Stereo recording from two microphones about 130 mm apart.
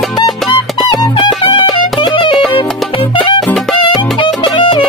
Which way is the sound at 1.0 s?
35° left (ahead or behind).